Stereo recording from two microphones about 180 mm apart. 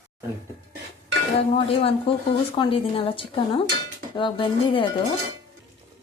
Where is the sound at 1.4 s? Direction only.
30° left (ahead or behind).